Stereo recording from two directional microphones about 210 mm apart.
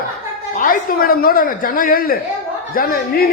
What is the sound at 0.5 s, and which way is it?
A man's voice, 40° left (ahead or behind).